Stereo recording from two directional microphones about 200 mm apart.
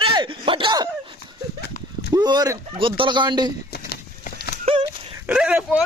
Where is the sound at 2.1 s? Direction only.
20° right (ahead or behind).